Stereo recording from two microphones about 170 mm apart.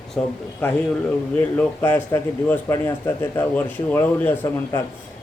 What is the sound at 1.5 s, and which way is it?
A man's voice, 10° left (ahead or behind).